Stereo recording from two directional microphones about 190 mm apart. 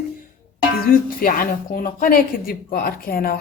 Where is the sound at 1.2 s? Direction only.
50° left (ahead or behind).